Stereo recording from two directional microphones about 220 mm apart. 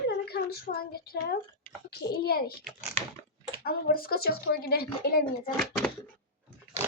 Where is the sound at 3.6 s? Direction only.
45° left (ahead or behind).